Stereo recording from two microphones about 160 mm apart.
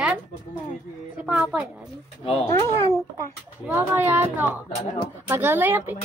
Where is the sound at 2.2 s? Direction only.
40° left (ahead or behind).